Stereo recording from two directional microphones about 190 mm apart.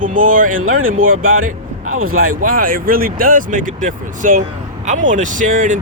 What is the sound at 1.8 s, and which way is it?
Speech, 90° right.